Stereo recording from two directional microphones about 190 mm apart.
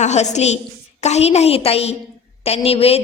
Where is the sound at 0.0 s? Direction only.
35° left (ahead or behind).